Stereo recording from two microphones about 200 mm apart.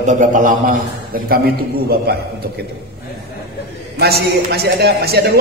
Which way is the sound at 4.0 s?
55° right (ahead or behind).